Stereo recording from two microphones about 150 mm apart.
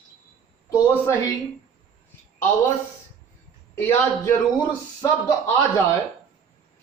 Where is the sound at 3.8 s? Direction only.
15° left (ahead or behind).